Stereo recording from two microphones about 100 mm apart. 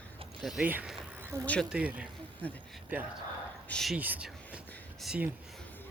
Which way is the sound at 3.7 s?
5° left (ahead or behind).